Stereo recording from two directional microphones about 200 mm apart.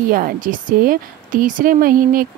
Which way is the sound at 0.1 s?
45° right (ahead or behind).